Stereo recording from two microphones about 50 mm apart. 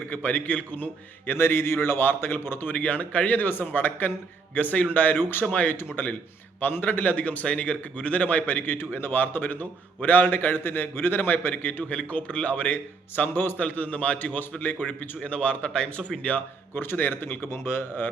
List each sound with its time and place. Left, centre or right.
0.1 s a man's voice: left
1.3 s a man's voice: left
2.7 s a man's voice: left
7.1 s a man's voice: left
11.9 s a man's voice: left
13.6 s speech: left
16.3 s a man's voice: left